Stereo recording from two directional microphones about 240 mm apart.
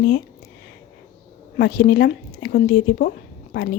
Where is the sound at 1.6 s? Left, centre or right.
Left.